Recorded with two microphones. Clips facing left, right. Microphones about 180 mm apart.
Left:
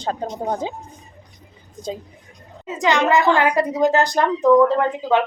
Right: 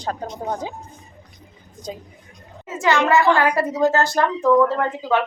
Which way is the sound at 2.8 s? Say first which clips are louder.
Even; 15° left (ahead or behind).